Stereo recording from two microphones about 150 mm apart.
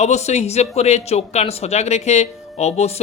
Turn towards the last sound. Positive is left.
turn(degrees=45)  # may be behind; listen again after turning